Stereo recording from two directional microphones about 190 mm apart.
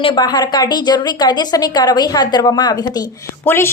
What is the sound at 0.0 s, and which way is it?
A woman's voice, 25° left (ahead or behind).